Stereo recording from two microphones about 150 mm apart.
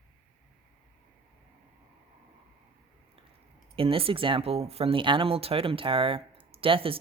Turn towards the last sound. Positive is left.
turn(degrees=-35)  # may be behind; listen again after turning